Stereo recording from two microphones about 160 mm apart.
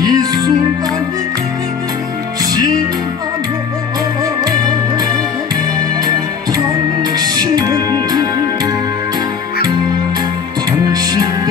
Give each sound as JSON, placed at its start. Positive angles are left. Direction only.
{"t": 0.0, "sound": "music", "side_deg": -25}
{"t": 7.2, "sound": "music", "side_deg": -25}